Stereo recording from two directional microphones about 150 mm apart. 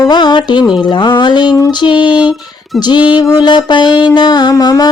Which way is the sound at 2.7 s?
Centre (ahead or behind).